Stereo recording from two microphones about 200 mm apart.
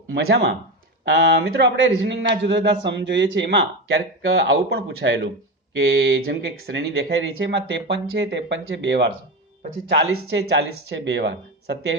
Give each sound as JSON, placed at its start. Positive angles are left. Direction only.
{"t": 0.1, "sound": "a man's voice", "side_deg": -60}
{"t": 9.9, "sound": "a man's voice", "side_deg": -80}